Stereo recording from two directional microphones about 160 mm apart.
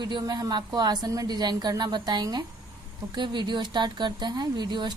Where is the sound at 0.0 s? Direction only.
25° right (ahead or behind).